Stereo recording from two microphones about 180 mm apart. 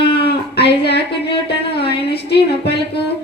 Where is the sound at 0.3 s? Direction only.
65° left (ahead or behind).